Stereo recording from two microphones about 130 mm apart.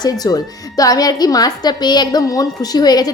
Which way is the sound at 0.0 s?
30° left (ahead or behind).